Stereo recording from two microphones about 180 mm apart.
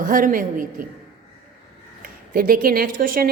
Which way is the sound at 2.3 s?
55° right (ahead or behind).